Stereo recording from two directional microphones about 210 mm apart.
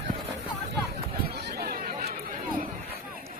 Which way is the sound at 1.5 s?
50° right (ahead or behind).